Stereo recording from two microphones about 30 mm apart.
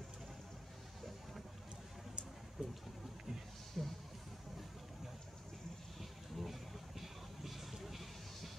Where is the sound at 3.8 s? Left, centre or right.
Centre.